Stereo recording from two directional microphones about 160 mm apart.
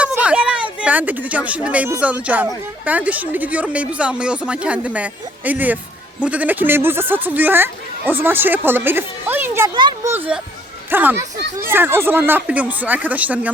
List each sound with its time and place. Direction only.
0.0 s a sound: 10° right (ahead or behind)
0.8 s speech: 10° right (ahead or behind)
9.7 s speech: 30° right (ahead or behind)
10.1 s speech: 10° right (ahead or behind)